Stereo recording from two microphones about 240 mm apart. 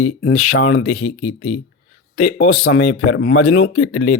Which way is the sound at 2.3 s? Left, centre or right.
Left.